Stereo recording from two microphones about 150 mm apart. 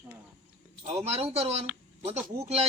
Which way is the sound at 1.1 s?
45° right (ahead or behind).